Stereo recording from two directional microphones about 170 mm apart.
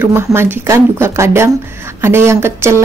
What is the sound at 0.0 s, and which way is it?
Speech, 15° right (ahead or behind).